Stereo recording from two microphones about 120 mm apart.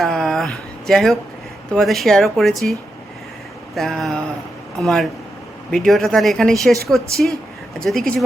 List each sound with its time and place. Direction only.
0.0 s a sound: centre (ahead or behind)
1.7 s speech: centre (ahead or behind)
3.8 s speech: centre (ahead or behind)